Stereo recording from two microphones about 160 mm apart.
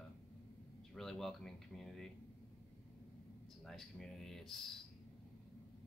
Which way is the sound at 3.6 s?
5° left (ahead or behind).